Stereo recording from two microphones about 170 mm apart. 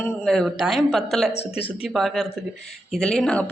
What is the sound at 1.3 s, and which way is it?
Speech, 35° left (ahead or behind).